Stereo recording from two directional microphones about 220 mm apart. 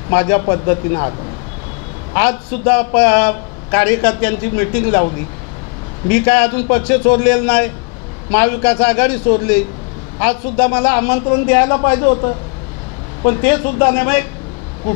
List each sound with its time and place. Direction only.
0.1 s a man's voice: 15° left (ahead or behind)
2.1 s a man's voice: 10° left (ahead or behind)
6.0 s a man's voice: 10° left (ahead or behind)
10.2 s a man's voice: 10° left (ahead or behind)
13.2 s a man's voice: 15° left (ahead or behind)